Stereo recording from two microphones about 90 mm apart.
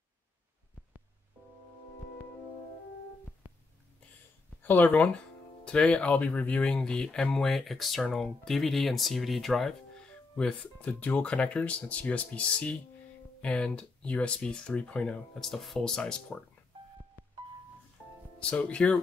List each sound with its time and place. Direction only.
3.4 s a sound: 25° right (ahead or behind)
4.6 s speech: 20° left (ahead or behind)
15.5 s speech: centre (ahead or behind)
17.2 s music: 25° right (ahead or behind)
18.4 s speech: 15° left (ahead or behind)